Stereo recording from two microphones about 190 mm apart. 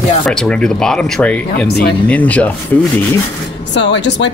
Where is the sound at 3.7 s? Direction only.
70° left (ahead or behind).